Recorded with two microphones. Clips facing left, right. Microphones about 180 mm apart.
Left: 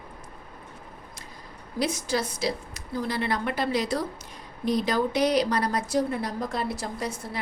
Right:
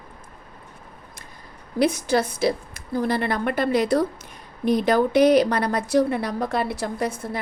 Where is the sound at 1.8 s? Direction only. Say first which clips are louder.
Right 7 dB; 60° right (ahead or behind).